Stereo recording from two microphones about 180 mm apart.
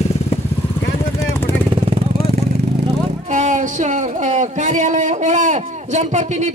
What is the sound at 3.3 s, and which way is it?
Speech, 45° right (ahead or behind).